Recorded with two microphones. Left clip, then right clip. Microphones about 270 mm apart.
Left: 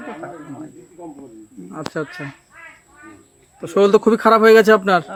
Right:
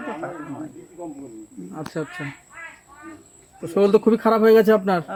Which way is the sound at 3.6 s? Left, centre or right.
Left.